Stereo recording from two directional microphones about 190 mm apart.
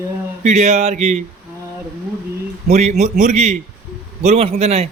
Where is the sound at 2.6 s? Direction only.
35° right (ahead or behind).